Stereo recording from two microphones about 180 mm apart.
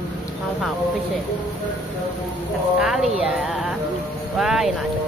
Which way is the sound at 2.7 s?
Centre (ahead or behind).